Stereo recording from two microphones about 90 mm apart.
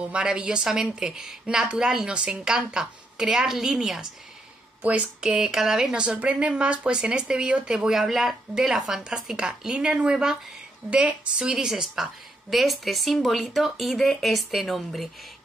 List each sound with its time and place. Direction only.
0.1 s speech: 10° right (ahead or behind)
4.8 s speech: 15° right (ahead or behind)
5.3 s a woman's voice: 5° right (ahead or behind)